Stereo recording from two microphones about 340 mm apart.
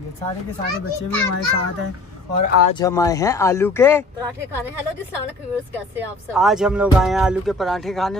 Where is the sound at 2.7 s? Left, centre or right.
Centre.